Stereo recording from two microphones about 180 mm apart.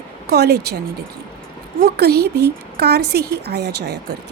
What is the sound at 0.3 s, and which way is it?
Speech, 65° right (ahead or behind).